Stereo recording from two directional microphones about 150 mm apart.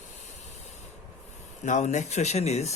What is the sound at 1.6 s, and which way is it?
Speech, 55° left (ahead or behind).